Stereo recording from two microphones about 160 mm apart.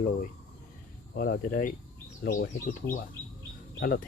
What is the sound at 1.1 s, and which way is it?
Fowl, 70° left (ahead or behind).